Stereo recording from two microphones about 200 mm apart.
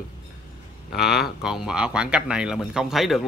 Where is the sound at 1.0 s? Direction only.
50° left (ahead or behind).